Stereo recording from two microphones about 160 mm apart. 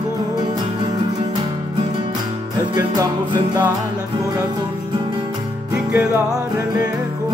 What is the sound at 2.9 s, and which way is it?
Music, 20° right (ahead or behind).